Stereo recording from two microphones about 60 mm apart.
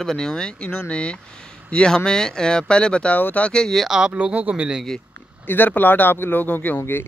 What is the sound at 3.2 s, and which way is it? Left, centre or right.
Speech, left.